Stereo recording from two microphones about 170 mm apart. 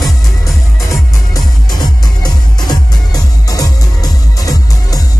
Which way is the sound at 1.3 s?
25° left (ahead or behind).